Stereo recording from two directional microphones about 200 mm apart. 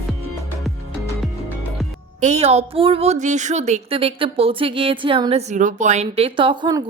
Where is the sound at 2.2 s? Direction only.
35° right (ahead or behind).